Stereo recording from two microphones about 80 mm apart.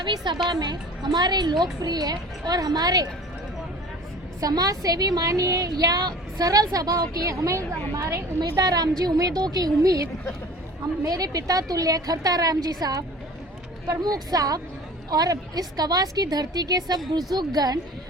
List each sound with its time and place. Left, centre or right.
0.0 s speech: right
0.4 s a woman's voice: right
4.4 s a woman's voice: right